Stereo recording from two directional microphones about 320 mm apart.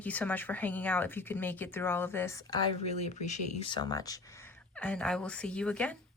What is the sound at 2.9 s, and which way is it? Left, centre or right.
Speech, left.